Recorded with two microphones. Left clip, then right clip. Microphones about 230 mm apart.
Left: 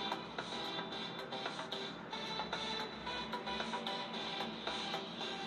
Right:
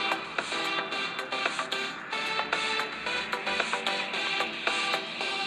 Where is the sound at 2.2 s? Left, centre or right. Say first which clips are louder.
Right 12 dB; right.